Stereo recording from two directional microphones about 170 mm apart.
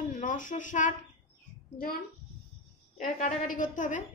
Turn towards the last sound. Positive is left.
turn(degrees=50)  # may be behind; listen again after turning